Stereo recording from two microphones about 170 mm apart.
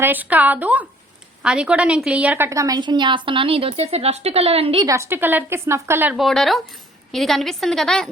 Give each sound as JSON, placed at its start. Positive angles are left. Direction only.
{"t": 0.0, "sound": "a woman's voice", "side_deg": -10}
{"t": 4.8, "sound": "a woman's voice", "side_deg": -20}
{"t": 6.1, "sound": "a woman's voice", "side_deg": 0}